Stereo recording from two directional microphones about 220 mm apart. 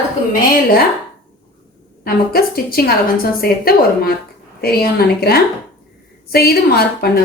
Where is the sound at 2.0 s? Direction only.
45° left (ahead or behind).